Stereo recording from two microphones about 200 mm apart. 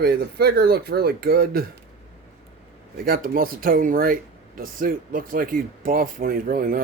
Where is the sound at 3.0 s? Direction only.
45° right (ahead or behind).